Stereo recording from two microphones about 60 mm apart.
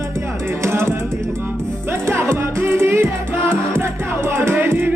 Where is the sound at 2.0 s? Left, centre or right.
Right.